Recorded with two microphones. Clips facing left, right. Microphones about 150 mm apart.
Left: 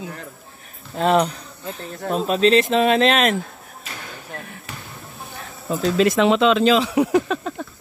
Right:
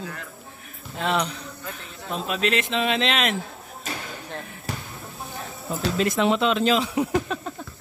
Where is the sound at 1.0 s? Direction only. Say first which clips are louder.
Left 7 dB; 40° left (ahead or behind).